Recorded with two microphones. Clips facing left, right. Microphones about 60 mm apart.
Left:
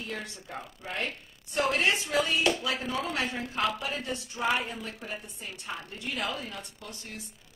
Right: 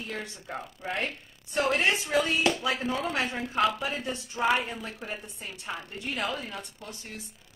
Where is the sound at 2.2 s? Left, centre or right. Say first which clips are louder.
Right 1 dB; right.